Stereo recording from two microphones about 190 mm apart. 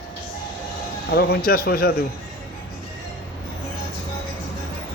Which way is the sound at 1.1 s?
55° left (ahead or behind).